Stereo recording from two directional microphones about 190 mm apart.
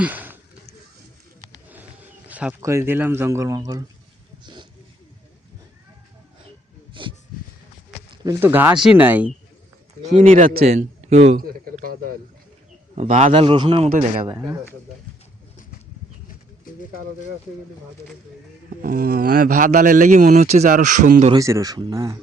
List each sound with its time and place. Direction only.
0.0 s a sound: 10° right (ahead or behind)
1.7 s speech: 10° right (ahead or behind)
7.0 s a sound: 25° right (ahead or behind)
8.1 s speech: 20° right (ahead or behind)
10.0 s speech: 35° right (ahead or behind)
11.3 s a man's voice: 50° right (ahead or behind); by 13.9 s 30° right (ahead or behind)
14.3 s speech: 20° right (ahead or behind)
18.8 s speech: 50° right (ahead or behind)
21.3 s a man's voice: 15° right (ahead or behind)